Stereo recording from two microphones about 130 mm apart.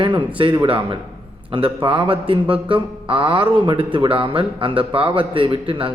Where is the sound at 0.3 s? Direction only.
40° right (ahead or behind).